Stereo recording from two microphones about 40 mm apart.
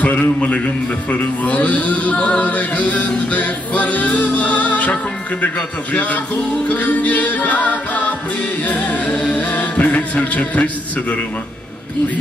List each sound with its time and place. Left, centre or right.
0.2 s music: left
5.9 s music: left